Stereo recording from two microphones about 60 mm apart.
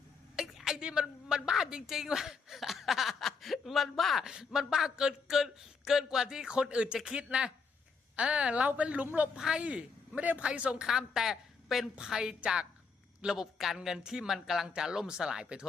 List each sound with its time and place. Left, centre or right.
0.3 s a sound: centre
1.3 s a woman's voice: centre; by 9.0 s right
9.3 s a woman's voice: centre
10.8 s speech: centre